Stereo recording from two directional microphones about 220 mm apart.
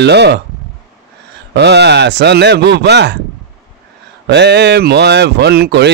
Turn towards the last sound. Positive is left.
turn(degrees=-50)  # may be behind; listen again after turning